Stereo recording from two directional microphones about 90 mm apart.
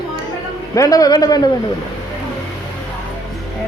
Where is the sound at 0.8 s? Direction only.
45° left (ahead or behind).